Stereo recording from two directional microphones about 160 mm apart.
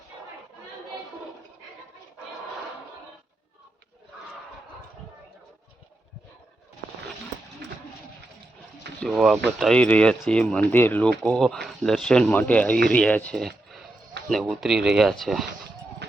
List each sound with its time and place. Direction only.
9.0 s speech: centre (ahead or behind)
14.2 s a sound: 90° right
14.5 s speech: centre (ahead or behind)